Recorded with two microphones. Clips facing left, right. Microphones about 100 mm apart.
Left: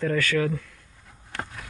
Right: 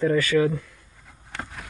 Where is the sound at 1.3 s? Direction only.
Centre (ahead or behind).